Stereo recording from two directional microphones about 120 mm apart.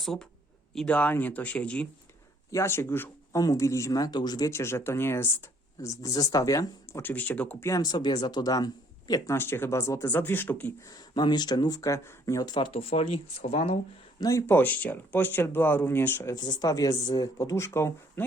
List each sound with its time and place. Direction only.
0.0 s speech: centre (ahead or behind)
2.5 s speech: 20° left (ahead or behind)
7.0 s speech: 15° left (ahead or behind)
7.6 s speech: 30° left (ahead or behind)
9.3 s speech: 20° left (ahead or behind)
10.8 s speech: 35° left (ahead or behind); by 13.7 s 55° left (ahead or behind)
14.2 s speech: 25° left (ahead or behind)
16.3 s speech: 35° left (ahead or behind)